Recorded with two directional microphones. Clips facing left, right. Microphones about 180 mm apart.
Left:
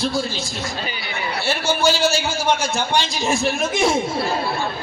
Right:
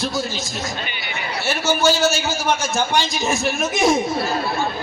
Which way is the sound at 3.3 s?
30° left (ahead or behind).